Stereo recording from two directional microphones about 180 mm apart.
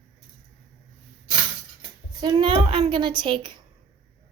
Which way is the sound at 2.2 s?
25° right (ahead or behind).